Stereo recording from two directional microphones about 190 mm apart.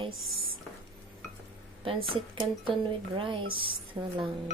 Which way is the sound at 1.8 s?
30° right (ahead or behind).